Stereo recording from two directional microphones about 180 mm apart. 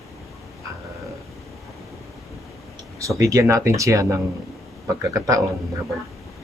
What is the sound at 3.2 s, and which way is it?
Speech, 20° right (ahead or behind).